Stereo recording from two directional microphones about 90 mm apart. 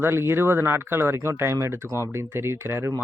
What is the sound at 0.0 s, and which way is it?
Speech, 30° right (ahead or behind).